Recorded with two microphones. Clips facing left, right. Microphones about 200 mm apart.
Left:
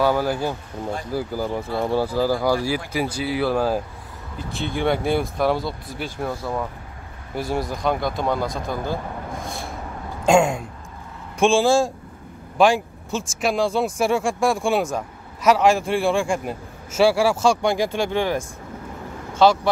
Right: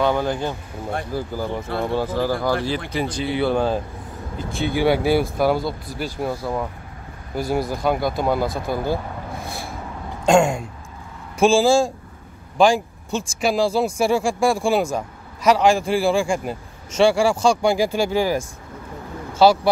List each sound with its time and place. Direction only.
0.0 s speech: 5° left (ahead or behind)
9.4 s vehicle: 5° right (ahead or behind)
10.2 s speech: 5° left (ahead or behind)